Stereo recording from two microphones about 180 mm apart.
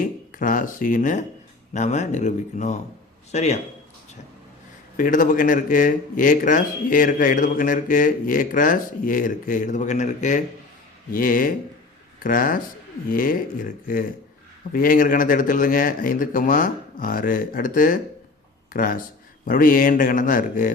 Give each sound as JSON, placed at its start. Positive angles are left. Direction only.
{"t": 0.0, "sound": "speech", "side_deg": 50}
{"t": 4.9, "sound": "speech", "side_deg": 50}